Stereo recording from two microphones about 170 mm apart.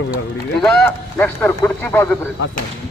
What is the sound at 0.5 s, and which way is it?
A man's voice, 5° left (ahead or behind).